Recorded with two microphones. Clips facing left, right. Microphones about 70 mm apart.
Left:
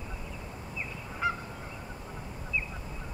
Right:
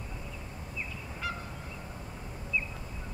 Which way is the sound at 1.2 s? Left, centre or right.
Left.